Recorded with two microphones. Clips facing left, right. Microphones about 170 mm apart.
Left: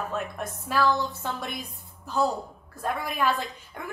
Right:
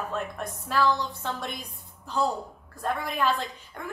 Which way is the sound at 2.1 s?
Centre (ahead or behind).